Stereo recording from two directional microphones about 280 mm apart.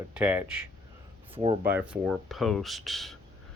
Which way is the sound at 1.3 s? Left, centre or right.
Centre.